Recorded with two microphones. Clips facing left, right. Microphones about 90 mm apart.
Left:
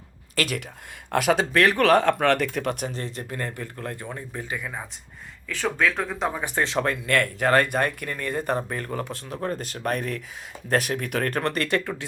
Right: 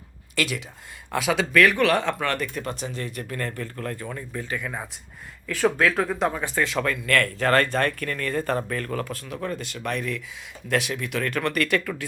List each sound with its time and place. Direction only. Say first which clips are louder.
0.3 s speech: even; 45° left (ahead or behind)
1.4 s speech: right 1 dB; 30° left (ahead or behind)
1.8 s speech: left 3 dB; 45° left (ahead or behind); by 2.9 s 65° left (ahead or behind)
2.9 s speech: even; 35° left (ahead or behind)
3.2 s speech: right 1 dB; 20° left (ahead or behind)
4.5 s speech: right 2 dB; centre (ahead or behind)
6.3 s speech: right 1 dB; 15° left (ahead or behind)
6.6 s speech: left 1 dB; 30° left (ahead or behind)